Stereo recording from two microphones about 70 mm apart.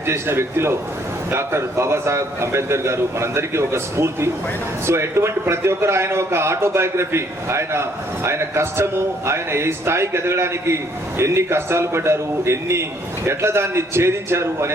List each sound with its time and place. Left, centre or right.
0.0 s a man's voice: right